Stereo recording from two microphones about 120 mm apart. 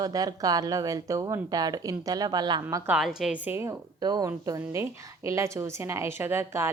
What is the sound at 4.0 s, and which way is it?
A woman's voice, 35° right (ahead or behind).